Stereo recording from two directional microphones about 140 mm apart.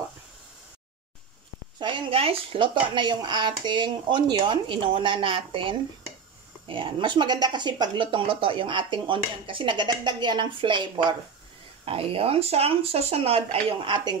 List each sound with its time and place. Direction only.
1.8 s speech: 35° right (ahead or behind)